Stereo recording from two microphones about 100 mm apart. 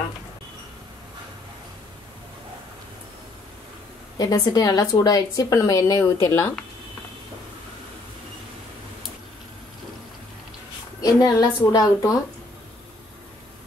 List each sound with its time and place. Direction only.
4.2 s speech: 40° left (ahead or behind)
11.0 s speech: 40° left (ahead or behind)